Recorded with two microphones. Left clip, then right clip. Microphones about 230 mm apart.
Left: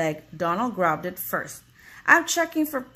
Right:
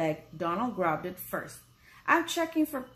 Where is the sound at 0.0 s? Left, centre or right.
Left.